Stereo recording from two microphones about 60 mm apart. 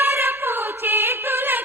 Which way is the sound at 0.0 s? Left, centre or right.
Right.